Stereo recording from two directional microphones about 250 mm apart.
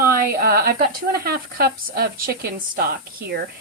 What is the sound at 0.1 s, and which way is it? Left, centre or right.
Speech, right.